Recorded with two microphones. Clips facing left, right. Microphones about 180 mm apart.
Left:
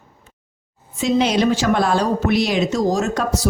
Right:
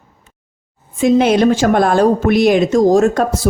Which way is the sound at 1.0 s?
55° right (ahead or behind).